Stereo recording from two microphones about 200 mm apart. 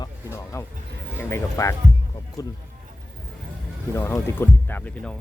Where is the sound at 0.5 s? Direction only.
15° left (ahead or behind).